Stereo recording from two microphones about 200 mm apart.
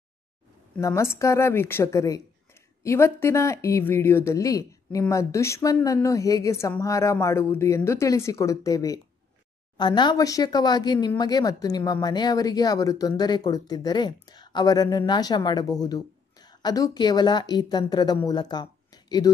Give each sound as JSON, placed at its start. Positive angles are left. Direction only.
{"t": 0.7, "sound": "speech", "side_deg": 15}